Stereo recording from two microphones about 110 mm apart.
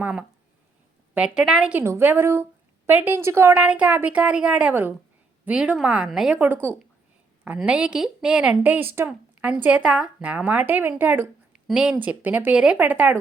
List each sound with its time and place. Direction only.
0.0 s a woman's voice: 10° right (ahead or behind)
1.7 s a woman's voice: 20° right (ahead or behind)
3.5 s a woman's voice: 10° right (ahead or behind)
6.3 s a woman's voice: 15° right (ahead or behind)